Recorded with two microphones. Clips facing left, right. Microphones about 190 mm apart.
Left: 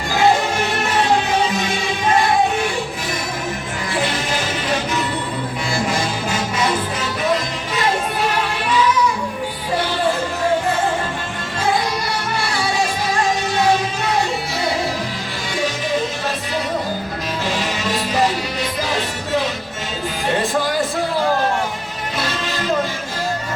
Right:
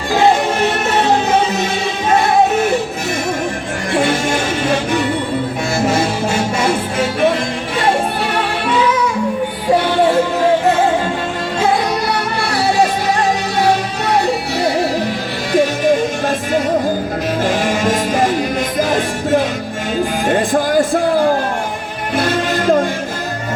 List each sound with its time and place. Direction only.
3.9 s music: 50° right (ahead or behind)
5.7 s music: 25° right (ahead or behind)
15.5 s music: 50° right (ahead or behind)
17.4 s music: 50° right (ahead or behind)